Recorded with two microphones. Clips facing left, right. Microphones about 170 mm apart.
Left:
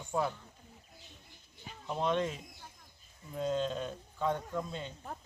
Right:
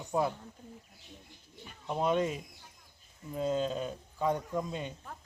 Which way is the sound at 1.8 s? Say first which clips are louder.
Right 3 dB; 10° right (ahead or behind).